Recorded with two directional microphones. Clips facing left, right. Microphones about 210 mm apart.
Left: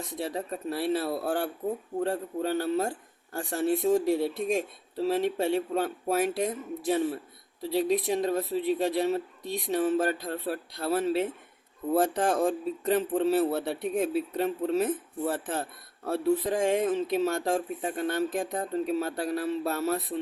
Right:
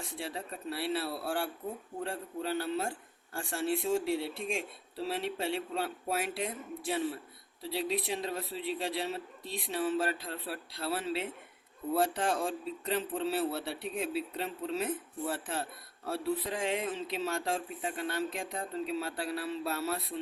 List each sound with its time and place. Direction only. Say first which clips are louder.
0.2 s speech: left 8 dB; 45° left (ahead or behind)